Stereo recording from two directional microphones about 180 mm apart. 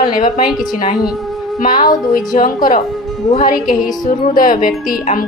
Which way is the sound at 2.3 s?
50° left (ahead or behind).